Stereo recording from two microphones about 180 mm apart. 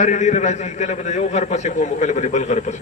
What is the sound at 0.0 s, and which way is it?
A man's voice, 40° left (ahead or behind).